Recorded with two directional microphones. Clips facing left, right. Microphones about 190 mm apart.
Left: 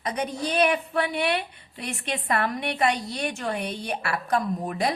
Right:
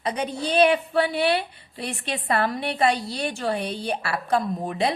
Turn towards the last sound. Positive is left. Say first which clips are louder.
# right 2 dB
turn(degrees=-25)  # may be behind; listen again after turning